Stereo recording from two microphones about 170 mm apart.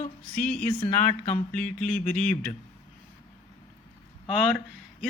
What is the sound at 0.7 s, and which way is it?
Speech, 30° left (ahead or behind).